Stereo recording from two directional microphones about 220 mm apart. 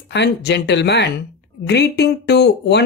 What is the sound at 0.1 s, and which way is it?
Speech, 50° left (ahead or behind).